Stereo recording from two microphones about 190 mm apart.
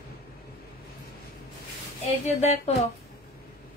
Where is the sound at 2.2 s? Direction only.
35° left (ahead or behind).